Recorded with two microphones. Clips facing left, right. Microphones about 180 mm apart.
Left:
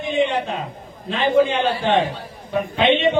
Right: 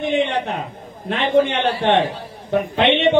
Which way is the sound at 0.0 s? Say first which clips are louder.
Right 1 dB; 65° right (ahead or behind).